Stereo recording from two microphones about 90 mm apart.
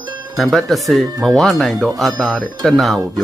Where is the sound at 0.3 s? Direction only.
Centre (ahead or behind).